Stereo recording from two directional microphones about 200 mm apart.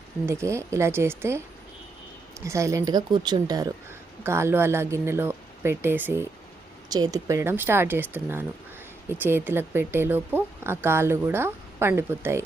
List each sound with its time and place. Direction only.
0.3 s speech: 15° right (ahead or behind)
2.4 s speech: 15° right (ahead or behind)